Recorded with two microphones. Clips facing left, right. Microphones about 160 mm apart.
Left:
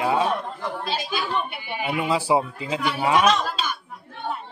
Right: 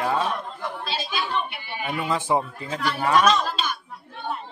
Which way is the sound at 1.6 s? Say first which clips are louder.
Left 2 dB; 15° left (ahead or behind).